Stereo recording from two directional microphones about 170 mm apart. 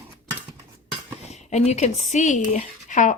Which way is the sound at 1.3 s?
40° left (ahead or behind).